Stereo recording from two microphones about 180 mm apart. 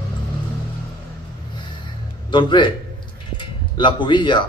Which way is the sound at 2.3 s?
25° left (ahead or behind).